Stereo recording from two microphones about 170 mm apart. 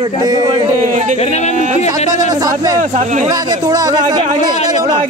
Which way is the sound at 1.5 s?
40° right (ahead or behind).